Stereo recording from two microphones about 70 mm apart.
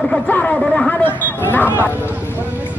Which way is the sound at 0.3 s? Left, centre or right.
Left.